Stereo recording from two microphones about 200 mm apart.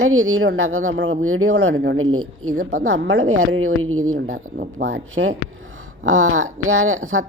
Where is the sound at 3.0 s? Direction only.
65° right (ahead or behind).